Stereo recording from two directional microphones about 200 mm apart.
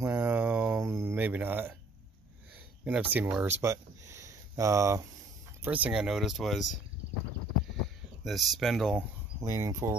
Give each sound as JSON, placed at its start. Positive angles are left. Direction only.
{"t": 0.0, "sound": "a sound", "side_deg": -10}
{"t": 2.8, "sound": "speech", "side_deg": -5}
{"t": 8.2, "sound": "speech", "side_deg": 0}
{"t": 9.4, "sound": "speech", "side_deg": -15}